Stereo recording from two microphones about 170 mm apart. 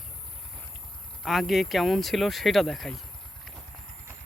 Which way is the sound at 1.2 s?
Centre (ahead or behind).